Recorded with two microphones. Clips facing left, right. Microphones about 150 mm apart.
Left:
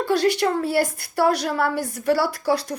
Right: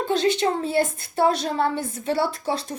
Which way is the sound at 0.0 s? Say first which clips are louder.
Left 1 dB; 20° right (ahead or behind).